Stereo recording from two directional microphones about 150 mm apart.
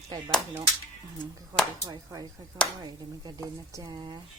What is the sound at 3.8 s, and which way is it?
Speech, 30° right (ahead or behind).